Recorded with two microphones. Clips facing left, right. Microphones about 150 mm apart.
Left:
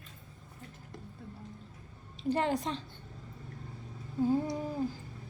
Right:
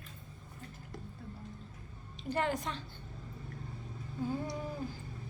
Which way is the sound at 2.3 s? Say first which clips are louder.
Left 4 dB; 30° left (ahead or behind).